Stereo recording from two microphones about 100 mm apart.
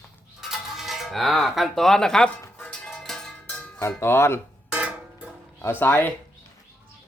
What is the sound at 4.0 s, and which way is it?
Speech, 25° left (ahead or behind).